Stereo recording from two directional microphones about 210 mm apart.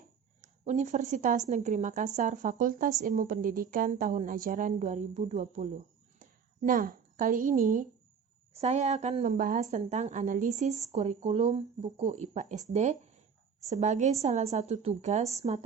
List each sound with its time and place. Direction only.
0.4 s a woman's voice: 35° right (ahead or behind)